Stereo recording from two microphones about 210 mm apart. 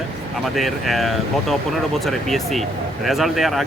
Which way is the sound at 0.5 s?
Centre (ahead or behind).